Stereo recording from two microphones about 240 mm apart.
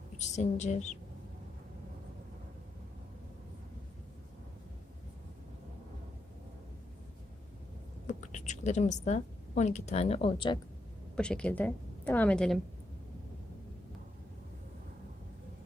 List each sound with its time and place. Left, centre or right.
0.2 s a woman's voice: left
8.0 s a woman's voice: left
11.2 s a woman's voice: centre